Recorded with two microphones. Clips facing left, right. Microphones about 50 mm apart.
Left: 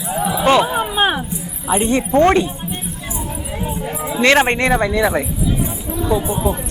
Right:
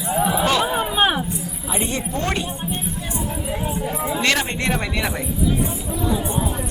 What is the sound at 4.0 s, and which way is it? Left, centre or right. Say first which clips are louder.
Speech: left 4 dB; centre.